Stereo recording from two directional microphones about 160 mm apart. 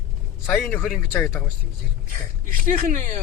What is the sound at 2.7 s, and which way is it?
Speech, 55° right (ahead or behind).